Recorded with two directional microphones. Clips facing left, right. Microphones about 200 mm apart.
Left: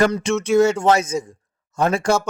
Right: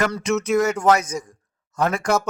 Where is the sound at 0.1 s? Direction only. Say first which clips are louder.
Left 2 dB; 30° left (ahead or behind).